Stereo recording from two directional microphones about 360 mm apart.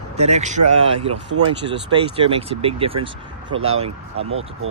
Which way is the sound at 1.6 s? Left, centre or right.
Right.